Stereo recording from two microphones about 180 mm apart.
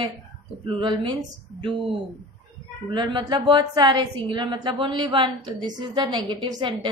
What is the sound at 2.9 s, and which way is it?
A woman's voice, 25° right (ahead or behind).